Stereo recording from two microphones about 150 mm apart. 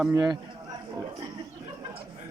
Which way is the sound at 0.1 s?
20° right (ahead or behind).